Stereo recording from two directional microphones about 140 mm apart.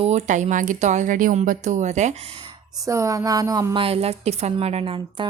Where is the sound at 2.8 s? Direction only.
20° right (ahead or behind).